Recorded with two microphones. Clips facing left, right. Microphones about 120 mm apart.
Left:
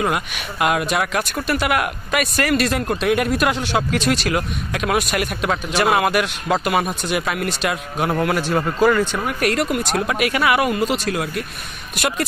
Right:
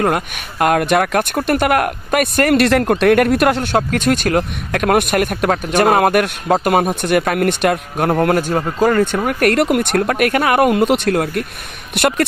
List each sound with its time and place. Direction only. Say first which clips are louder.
0.0 s speech: right 4 dB; 50° right (ahead or behind)
10.7 s speech: right 6 dB; 60° right (ahead or behind)